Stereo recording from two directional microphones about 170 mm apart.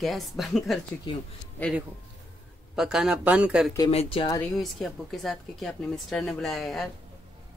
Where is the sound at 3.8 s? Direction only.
35° left (ahead or behind).